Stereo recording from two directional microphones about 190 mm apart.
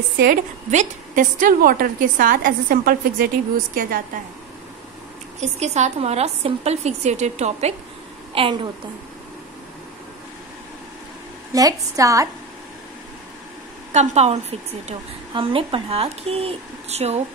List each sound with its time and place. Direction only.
0.2 s a woman's voice: 45° right (ahead or behind)
5.4 s a woman's voice: 35° right (ahead or behind)
11.5 s a woman's voice: 20° right (ahead or behind)
13.9 s a woman's voice: 35° right (ahead or behind)